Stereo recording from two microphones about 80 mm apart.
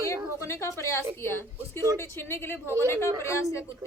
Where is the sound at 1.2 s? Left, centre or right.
Left.